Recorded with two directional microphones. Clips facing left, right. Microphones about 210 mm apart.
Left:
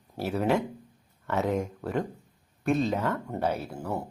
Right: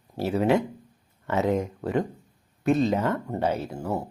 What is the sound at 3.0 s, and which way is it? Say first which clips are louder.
Speech: right 3 dB; centre (ahead or behind).